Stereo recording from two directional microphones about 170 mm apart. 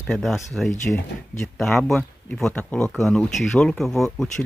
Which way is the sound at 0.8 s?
15° left (ahead or behind).